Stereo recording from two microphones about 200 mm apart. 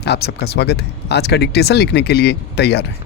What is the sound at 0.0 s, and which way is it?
Speech, 55° left (ahead or behind).